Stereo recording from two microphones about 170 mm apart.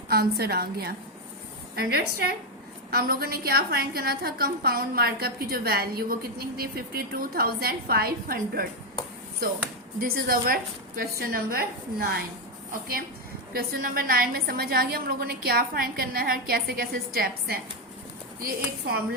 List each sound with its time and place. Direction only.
0.1 s a woman's voice: 65° right (ahead or behind)
10.0 s a woman's voice: 60° right (ahead or behind)
13.5 s a woman's voice: 60° right (ahead or behind)